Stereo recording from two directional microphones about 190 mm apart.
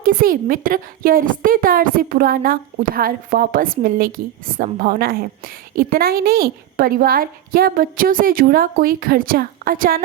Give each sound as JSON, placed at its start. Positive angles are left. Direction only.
{"t": 0.0, "sound": "a woman's voice", "side_deg": -50}